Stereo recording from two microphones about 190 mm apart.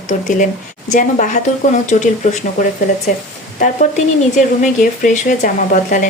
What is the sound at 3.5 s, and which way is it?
A woman's voice, 40° left (ahead or behind).